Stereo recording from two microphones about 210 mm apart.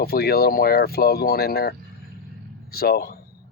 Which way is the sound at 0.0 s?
45° left (ahead or behind).